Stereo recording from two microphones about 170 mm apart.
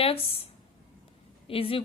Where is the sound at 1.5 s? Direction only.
35° left (ahead or behind).